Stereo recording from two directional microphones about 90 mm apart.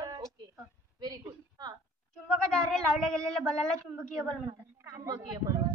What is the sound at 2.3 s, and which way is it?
A man's voice, 5° left (ahead or behind).